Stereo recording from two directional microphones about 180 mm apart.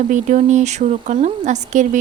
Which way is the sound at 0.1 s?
40° right (ahead or behind).